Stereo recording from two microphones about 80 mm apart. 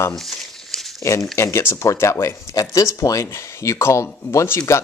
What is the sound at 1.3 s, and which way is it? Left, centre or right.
Speech, left.